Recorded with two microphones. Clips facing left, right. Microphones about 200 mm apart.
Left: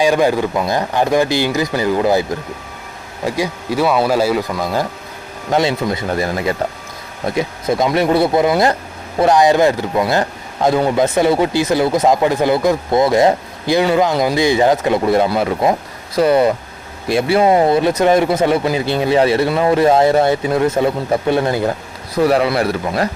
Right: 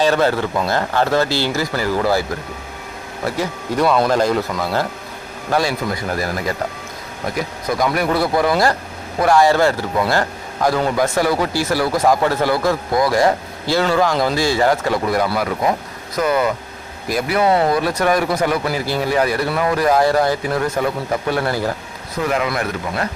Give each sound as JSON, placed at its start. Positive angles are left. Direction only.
{"t": 0.0, "sound": "speech", "side_deg": 15}
{"t": 3.2, "sound": "speech", "side_deg": 10}
{"t": 22.2, "sound": "speech", "side_deg": 35}